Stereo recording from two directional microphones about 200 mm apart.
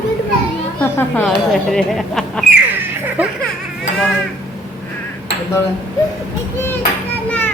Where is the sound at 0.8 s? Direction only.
5° left (ahead or behind).